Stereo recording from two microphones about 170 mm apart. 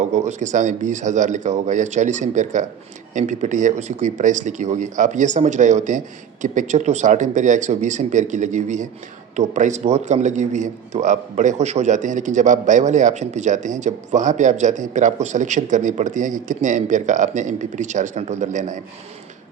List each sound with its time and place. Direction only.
0.0 s a man's voice: 40° right (ahead or behind)